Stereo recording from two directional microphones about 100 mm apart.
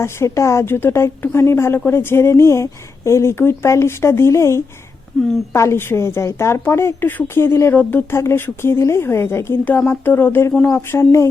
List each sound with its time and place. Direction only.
0.0 s a woman's voice: 30° left (ahead or behind)